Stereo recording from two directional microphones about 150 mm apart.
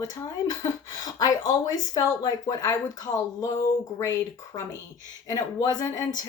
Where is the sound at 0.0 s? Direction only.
25° left (ahead or behind).